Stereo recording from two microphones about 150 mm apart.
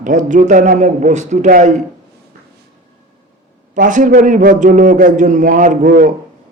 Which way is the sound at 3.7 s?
60° right (ahead or behind).